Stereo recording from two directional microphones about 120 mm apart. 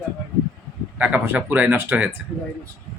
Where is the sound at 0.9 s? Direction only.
10° right (ahead or behind).